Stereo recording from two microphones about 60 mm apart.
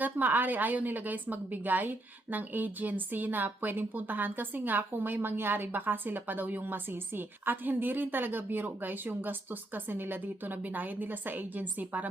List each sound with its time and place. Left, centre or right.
0.0 s a woman's voice: right